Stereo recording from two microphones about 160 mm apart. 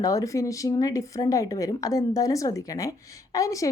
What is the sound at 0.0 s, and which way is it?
A woman's voice, 20° left (ahead or behind).